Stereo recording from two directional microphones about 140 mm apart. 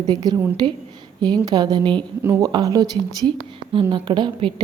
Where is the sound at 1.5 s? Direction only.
30° right (ahead or behind).